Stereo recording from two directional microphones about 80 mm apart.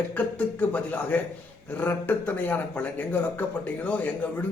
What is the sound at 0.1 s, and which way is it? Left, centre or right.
Speech, centre.